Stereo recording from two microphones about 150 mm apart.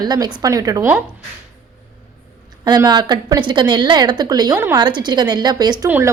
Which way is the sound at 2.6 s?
25° right (ahead or behind).